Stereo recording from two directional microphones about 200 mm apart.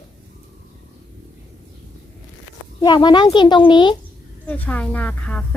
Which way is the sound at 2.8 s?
20° left (ahead or behind).